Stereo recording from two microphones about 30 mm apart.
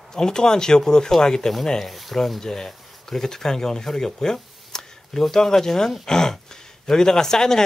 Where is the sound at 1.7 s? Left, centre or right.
Centre.